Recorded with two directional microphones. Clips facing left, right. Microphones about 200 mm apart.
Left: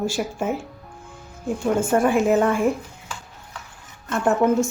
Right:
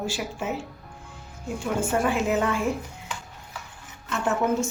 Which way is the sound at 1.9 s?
50° left (ahead or behind).